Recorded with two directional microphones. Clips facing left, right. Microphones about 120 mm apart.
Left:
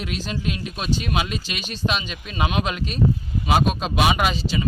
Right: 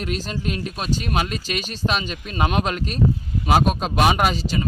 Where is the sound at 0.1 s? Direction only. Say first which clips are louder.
Right 1 dB; 40° right (ahead or behind).